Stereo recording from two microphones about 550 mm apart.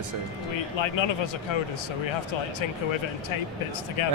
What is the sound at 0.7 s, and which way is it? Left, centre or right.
Speech, left.